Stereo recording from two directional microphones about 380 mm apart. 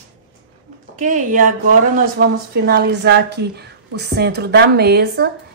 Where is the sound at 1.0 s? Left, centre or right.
Right.